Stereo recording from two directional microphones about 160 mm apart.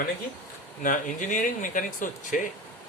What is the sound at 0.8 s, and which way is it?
Speech, 55° left (ahead or behind).